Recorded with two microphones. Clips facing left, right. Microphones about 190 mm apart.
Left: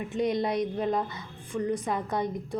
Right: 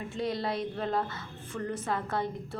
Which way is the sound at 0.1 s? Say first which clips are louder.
Left 5 dB; 20° left (ahead or behind).